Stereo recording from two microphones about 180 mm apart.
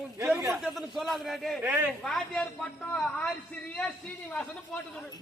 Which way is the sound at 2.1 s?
5° left (ahead or behind).